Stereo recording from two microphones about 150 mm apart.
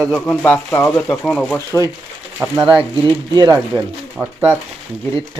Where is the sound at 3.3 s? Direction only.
25° right (ahead or behind).